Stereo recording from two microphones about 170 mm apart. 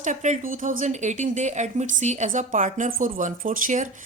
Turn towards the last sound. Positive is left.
turn(degrees=-50)  # may be behind; listen again after turning